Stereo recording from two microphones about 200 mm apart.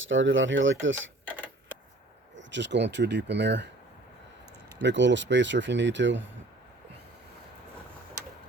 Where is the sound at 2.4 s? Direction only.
65° right (ahead or behind).